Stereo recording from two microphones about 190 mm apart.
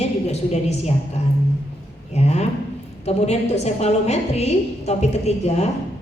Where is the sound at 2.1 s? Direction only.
35° left (ahead or behind).